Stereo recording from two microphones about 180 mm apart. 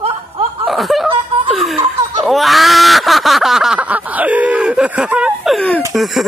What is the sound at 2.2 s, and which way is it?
Speech, centre (ahead or behind).